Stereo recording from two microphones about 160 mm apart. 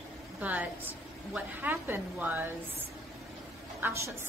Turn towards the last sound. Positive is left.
turn(degrees=-15)  # may be behind; listen again after turning